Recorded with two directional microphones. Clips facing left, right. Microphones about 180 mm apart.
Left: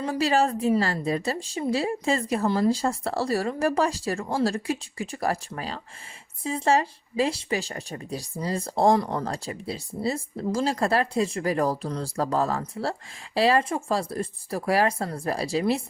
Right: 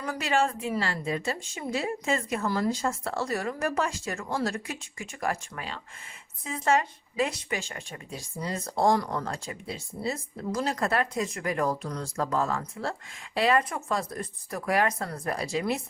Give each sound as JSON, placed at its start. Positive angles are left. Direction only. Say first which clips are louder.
{"t": 0.0, "sound": "speech", "louder": "left 4 dB", "side_deg": 30}